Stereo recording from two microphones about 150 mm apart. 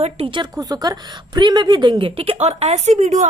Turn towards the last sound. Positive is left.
turn(degrees=-50)  # may be behind; listen again after turning